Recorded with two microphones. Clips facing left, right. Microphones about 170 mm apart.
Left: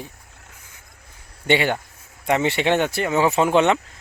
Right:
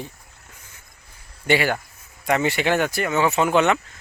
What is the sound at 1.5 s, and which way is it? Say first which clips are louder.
Speech: left 1 dB; 25° left (ahead or behind).